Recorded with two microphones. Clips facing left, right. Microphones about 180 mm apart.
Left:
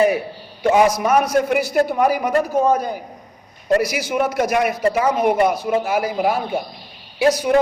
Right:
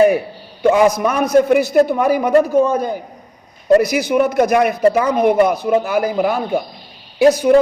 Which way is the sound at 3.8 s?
55° right (ahead or behind).